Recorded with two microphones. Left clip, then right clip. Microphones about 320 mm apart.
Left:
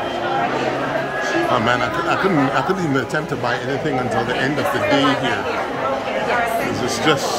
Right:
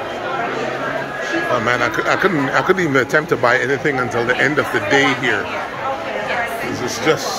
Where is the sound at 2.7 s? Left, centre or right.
Centre.